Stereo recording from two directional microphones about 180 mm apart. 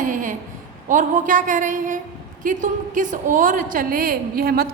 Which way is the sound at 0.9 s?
45° right (ahead or behind).